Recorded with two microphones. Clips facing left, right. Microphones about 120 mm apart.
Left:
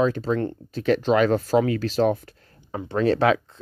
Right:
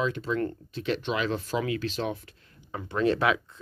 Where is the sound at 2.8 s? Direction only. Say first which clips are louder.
Left 4 dB; 35° left (ahead or behind).